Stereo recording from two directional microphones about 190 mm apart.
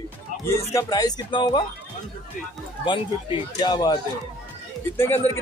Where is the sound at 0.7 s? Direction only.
20° left (ahead or behind).